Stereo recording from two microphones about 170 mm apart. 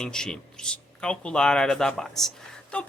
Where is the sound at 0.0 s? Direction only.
5° left (ahead or behind).